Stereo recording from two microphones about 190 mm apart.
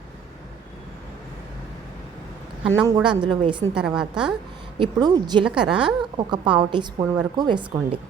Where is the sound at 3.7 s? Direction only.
5° right (ahead or behind).